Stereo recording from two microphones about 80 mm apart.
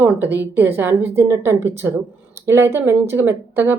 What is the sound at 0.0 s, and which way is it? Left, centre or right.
A woman's voice, right.